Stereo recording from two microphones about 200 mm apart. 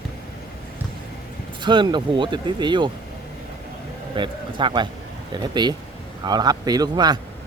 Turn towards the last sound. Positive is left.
turn(degrees=-20)  # may be behind; listen again after turning